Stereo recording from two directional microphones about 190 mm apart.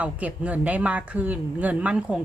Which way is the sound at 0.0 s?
5° right (ahead or behind).